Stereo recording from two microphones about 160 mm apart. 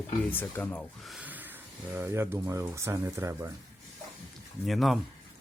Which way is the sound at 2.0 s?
15° right (ahead or behind).